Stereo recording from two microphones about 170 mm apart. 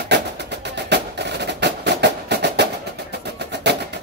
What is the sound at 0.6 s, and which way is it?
Music, 90° right.